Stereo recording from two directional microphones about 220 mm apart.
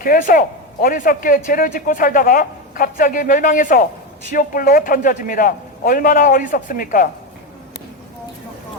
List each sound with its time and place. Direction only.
0.0 s a man's voice: 40° left (ahead or behind)